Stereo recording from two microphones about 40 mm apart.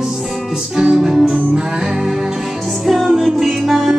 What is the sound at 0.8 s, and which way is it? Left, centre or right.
Music, centre.